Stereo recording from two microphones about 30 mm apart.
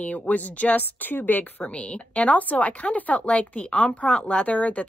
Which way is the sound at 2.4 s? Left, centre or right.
Left.